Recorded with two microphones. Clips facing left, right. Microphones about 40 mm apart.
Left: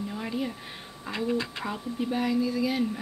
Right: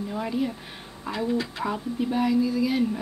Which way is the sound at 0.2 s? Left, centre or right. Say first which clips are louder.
Right 6 dB; centre.